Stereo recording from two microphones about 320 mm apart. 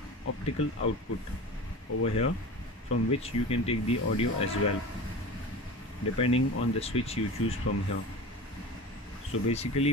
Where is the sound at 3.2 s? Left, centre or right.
Centre.